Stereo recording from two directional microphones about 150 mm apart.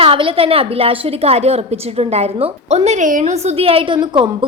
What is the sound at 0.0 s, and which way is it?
A woman's voice, 35° right (ahead or behind).